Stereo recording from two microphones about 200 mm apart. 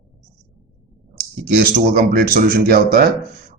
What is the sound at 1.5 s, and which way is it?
A man's voice, 45° right (ahead or behind).